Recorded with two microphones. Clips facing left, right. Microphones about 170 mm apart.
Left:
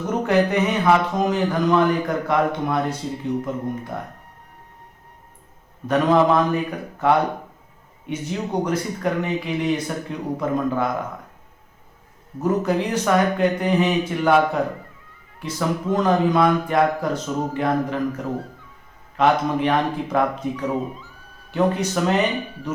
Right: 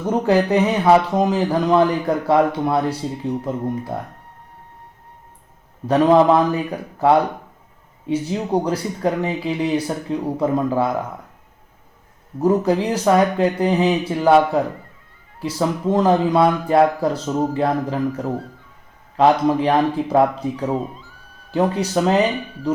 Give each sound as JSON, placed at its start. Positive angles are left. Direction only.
{"t": 0.3, "sound": "speech", "side_deg": -30}
{"t": 5.9, "sound": "speech", "side_deg": -35}
{"t": 12.4, "sound": "speech", "side_deg": -30}
{"t": 19.1, "sound": "speech", "side_deg": -30}